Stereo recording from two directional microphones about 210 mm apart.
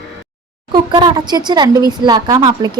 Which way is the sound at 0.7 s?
20° right (ahead or behind).